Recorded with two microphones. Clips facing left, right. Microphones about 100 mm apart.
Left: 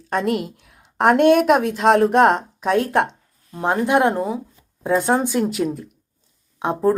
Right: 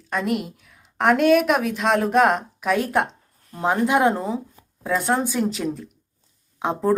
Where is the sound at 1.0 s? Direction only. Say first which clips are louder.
Left 3 dB; 35° left (ahead or behind).